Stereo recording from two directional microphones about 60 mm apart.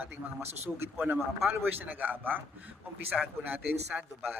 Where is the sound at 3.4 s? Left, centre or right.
Right.